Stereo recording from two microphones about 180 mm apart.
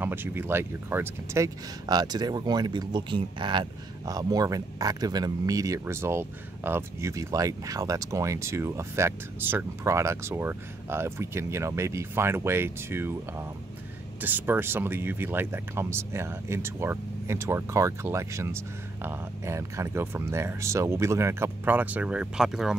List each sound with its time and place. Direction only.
0.0 s speech: 10° right (ahead or behind)